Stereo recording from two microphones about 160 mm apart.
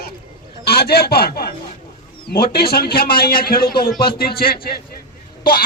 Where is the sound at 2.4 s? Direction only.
70° left (ahead or behind).